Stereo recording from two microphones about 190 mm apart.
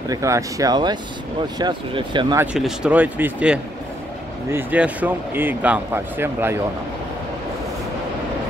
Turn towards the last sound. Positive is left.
turn(degrees=-10)  # may be behind; listen again after turning